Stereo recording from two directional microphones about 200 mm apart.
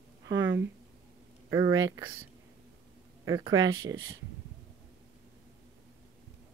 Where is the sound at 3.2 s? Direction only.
20° right (ahead or behind).